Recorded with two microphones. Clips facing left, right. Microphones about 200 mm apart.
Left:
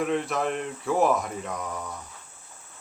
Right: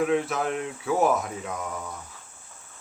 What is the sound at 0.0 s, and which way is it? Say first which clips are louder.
Speech: right 2 dB; centre (ahead or behind).